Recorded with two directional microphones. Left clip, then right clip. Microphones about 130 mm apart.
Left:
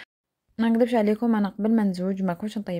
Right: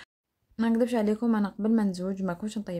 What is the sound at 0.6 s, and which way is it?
A woman's voice, 35° left (ahead or behind).